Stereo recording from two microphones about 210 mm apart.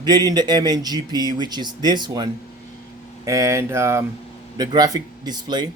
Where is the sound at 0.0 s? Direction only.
20° right (ahead or behind).